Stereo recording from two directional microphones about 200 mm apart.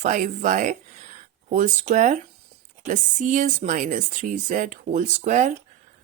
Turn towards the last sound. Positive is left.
turn(degrees=-35)  # may be behind; listen again after turning